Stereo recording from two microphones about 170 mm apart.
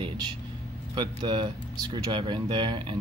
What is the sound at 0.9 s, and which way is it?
Speech, 25° right (ahead or behind).